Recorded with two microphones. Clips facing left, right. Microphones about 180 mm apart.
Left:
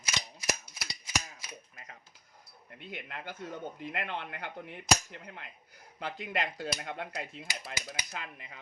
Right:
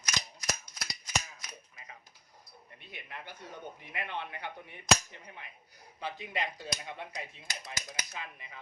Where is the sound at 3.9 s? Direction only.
65° left (ahead or behind).